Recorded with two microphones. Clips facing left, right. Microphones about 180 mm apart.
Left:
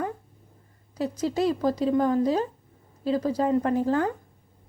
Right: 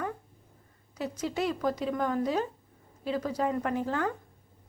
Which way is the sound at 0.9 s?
35° left (ahead or behind).